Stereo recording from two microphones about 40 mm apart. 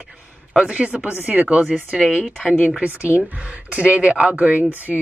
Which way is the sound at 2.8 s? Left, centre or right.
Right.